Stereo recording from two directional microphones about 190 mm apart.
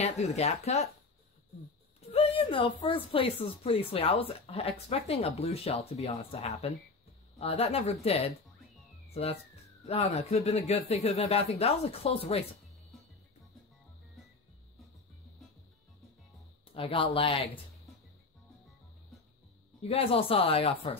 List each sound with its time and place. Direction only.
0.0 s speech: 35° left (ahead or behind)
2.0 s speech: 30° left (ahead or behind)
16.7 s speech: 25° left (ahead or behind)
19.8 s speech: 30° left (ahead or behind)